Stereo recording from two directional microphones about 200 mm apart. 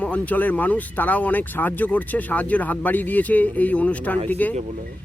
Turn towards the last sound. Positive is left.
turn(degrees=10)  # may be behind; listen again after turning